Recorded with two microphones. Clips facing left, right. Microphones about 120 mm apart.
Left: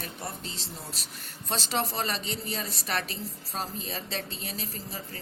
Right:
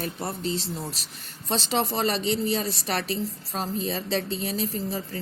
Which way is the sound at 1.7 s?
25° right (ahead or behind).